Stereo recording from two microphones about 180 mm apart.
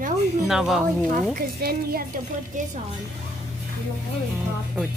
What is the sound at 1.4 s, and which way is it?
Speech, 55° right (ahead or behind).